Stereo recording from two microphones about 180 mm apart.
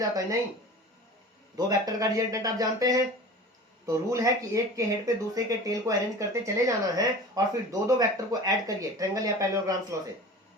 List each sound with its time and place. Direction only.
1.5 s speech: 20° right (ahead or behind)